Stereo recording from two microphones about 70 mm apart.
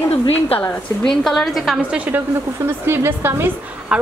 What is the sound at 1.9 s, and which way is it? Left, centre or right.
Speech, right.